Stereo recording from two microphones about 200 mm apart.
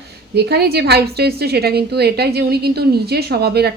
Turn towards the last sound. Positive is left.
turn(degrees=-55)  # may be behind; listen again after turning